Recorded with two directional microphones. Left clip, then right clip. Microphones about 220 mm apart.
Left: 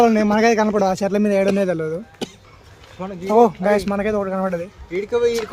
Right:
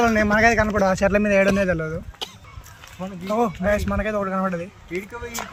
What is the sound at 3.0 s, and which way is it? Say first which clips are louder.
A man's voice: left 8 dB; 10° left (ahead or behind).